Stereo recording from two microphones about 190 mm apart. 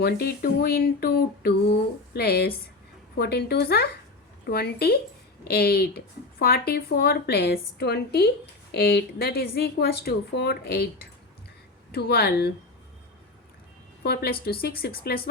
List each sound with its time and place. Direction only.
0.0 s a woman's voice: 55° left (ahead or behind)
11.9 s a woman's voice: 55° left (ahead or behind)
14.0 s a woman's voice: 55° left (ahead or behind)